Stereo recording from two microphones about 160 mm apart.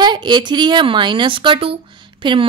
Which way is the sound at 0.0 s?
25° right (ahead or behind).